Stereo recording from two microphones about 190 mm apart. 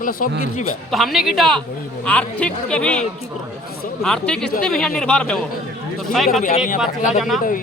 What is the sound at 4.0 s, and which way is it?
Speech, 5° left (ahead or behind).